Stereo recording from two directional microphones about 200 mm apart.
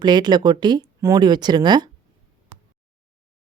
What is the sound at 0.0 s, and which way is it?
Speech, 20° right (ahead or behind).